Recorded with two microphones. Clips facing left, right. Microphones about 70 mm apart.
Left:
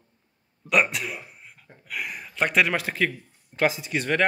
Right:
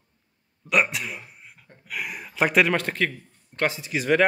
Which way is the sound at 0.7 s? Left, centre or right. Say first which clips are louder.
Even; centre.